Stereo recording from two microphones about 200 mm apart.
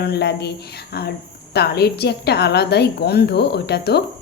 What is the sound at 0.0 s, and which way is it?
A woman's voice, 55° left (ahead or behind).